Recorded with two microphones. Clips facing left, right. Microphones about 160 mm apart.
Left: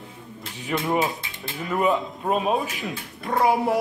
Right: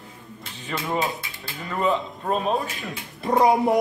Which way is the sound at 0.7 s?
10° left (ahead or behind).